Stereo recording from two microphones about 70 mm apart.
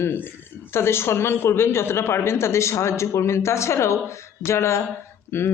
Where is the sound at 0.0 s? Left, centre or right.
Left.